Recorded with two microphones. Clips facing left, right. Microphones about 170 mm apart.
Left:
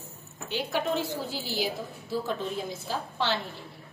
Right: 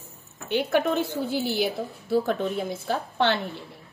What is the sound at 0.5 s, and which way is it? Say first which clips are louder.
A woman's voice: right 6 dB; 60° right (ahead or behind).